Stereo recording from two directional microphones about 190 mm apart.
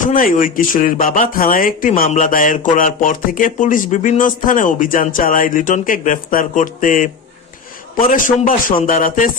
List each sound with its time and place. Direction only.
0.0 s speech: 45° left (ahead or behind)